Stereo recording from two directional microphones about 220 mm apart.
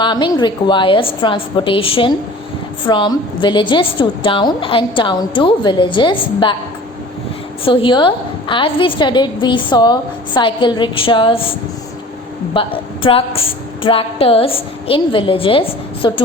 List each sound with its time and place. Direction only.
0.0 s a woman's voice: 20° left (ahead or behind)
7.6 s a woman's voice: 25° left (ahead or behind)
12.5 s a woman's voice: 25° left (ahead or behind)